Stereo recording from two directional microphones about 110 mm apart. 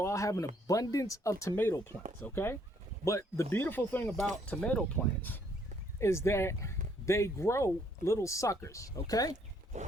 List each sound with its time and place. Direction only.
0.0 s speech: 30° left (ahead or behind)
6.0 s speech: 25° left (ahead or behind)